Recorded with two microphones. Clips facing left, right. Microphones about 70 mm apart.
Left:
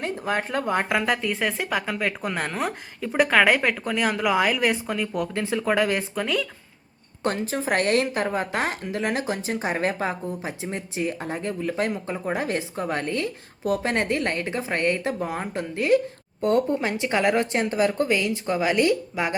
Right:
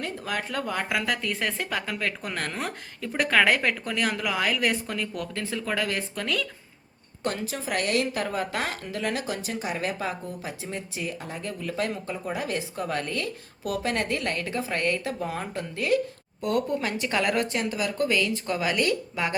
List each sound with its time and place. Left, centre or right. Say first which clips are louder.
0.0 s speech: left 5 dB; left
1.2 s a woman's voice: left 3 dB; centre
5.3 s speech: left 8 dB; left
6.2 s a woman's voice: left 1 dB; centre
7.4 s a woman's voice: left 7 dB; left
8.0 s speech: left 3 dB; left